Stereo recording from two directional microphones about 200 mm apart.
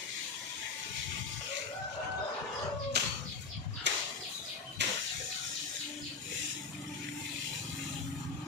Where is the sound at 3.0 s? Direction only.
55° right (ahead or behind).